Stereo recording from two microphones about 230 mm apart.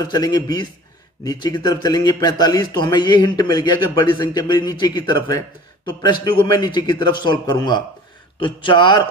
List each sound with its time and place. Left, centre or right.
0.0 s a man's voice: centre